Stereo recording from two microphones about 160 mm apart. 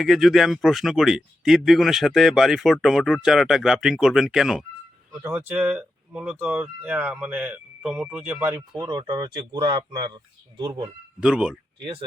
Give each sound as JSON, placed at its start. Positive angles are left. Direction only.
{"t": 0.0, "sound": "speech", "side_deg": 0}
{"t": 5.2, "sound": "speech", "side_deg": -15}
{"t": 8.7, "sound": "speech", "side_deg": -25}
{"t": 11.2, "sound": "speech", "side_deg": -5}